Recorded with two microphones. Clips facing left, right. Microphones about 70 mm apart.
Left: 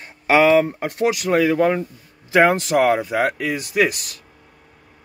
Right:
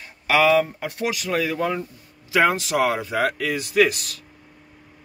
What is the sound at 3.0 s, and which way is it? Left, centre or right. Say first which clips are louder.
Speech: left 2 dB; left.